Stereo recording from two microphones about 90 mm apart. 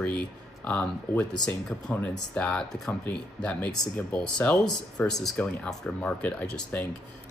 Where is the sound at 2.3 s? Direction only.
10° left (ahead or behind).